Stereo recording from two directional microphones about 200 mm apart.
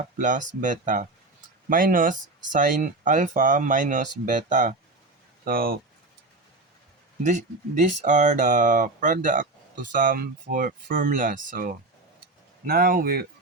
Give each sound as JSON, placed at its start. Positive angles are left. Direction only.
{"t": 0.2, "sound": "speech", "side_deg": -40}
{"t": 7.3, "sound": "speech", "side_deg": -40}